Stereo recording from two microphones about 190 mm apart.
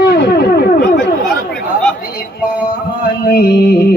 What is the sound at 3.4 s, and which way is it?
Mantra, 60° left (ahead or behind).